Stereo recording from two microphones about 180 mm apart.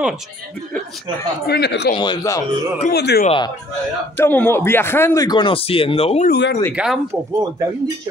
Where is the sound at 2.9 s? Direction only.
65° left (ahead or behind).